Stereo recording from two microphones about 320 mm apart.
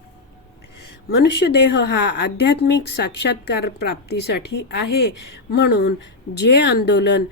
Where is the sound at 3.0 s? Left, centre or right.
Left.